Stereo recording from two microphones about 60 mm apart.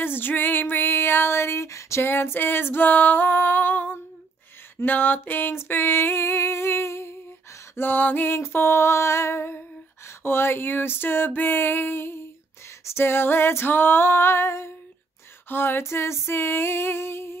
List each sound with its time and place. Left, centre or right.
0.0 s female singing: left
7.7 s female singing: left